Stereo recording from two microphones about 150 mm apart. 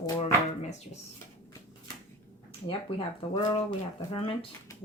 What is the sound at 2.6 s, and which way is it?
Speech, 35° left (ahead or behind).